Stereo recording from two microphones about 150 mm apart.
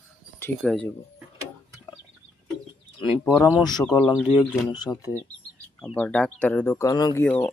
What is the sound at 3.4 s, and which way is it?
Speech, 25° left (ahead or behind).